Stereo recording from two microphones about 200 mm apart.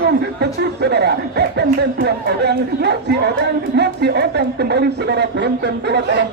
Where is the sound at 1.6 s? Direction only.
55° right (ahead or behind).